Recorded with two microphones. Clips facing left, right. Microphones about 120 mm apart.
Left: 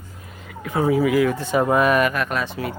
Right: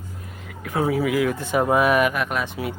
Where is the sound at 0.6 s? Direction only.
Centre (ahead or behind).